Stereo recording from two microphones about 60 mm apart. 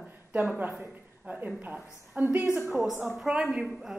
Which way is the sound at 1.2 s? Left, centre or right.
Right.